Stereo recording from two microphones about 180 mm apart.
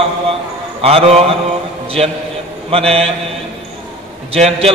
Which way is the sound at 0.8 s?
35° right (ahead or behind).